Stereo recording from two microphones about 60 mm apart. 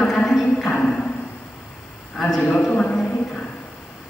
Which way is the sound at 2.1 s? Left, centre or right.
Centre.